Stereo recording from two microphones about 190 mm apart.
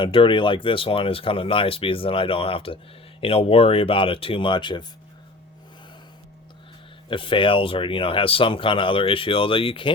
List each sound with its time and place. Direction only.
0.0 s speech: 25° left (ahead or behind)
7.1 s speech: 25° left (ahead or behind)